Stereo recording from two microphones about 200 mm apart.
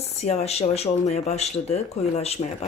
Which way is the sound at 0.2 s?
35° left (ahead or behind).